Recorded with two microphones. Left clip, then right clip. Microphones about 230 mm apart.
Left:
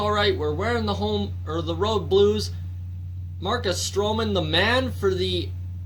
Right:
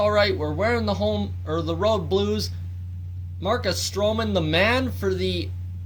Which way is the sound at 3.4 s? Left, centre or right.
Right.